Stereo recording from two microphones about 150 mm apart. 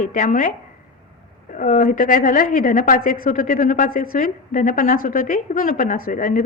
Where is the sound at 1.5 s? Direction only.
60° left (ahead or behind).